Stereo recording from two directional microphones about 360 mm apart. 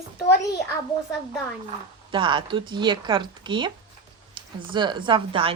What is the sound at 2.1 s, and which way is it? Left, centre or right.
A woman's voice, centre.